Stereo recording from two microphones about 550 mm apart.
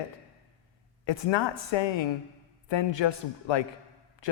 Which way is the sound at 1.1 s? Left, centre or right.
Left.